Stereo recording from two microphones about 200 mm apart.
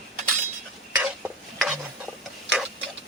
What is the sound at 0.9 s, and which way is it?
Stir, 5° right (ahead or behind).